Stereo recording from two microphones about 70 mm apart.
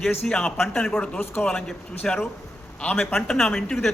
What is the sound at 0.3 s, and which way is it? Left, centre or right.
Speech, centre.